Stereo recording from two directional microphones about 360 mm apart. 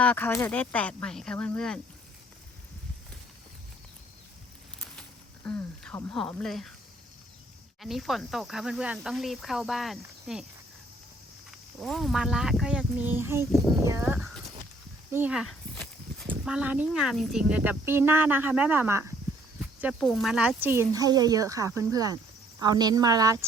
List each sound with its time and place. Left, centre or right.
0.0 s speech: centre
5.5 s speech: centre
7.8 s speech: centre
11.8 s speech: centre
14.4 s a sound: centre
15.1 s speech: centre